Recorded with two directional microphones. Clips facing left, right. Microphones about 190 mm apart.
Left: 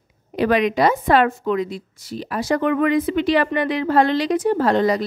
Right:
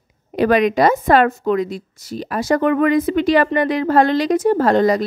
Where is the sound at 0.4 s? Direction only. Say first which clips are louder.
Right 3 dB; 45° right (ahead or behind).